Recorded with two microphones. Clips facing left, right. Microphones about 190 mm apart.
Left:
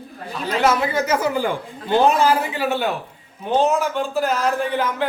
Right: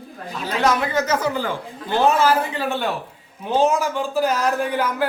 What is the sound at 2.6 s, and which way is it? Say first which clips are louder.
Speech: left 2 dB; 5° left (ahead or behind).